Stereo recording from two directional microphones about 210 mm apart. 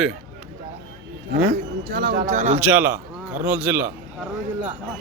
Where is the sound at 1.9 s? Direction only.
45° right (ahead or behind).